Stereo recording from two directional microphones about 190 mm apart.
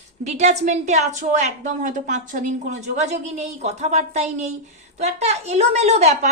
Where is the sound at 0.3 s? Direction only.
35° right (ahead or behind).